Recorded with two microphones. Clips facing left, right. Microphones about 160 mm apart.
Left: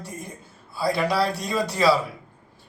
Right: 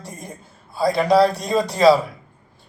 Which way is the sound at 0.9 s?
45° right (ahead or behind).